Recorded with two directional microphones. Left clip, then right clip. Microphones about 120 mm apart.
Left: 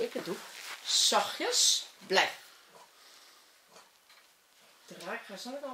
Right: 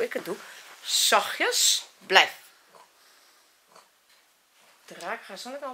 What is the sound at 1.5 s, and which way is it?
Speech, 20° right (ahead or behind).